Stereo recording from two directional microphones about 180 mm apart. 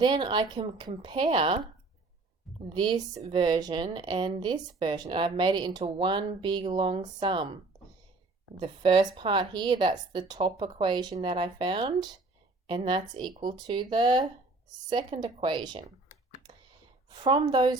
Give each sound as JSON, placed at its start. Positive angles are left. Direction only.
{"t": 0.0, "sound": "speech", "side_deg": -25}
{"t": 2.6, "sound": "speech", "side_deg": -25}
{"t": 17.1, "sound": "speech", "side_deg": -25}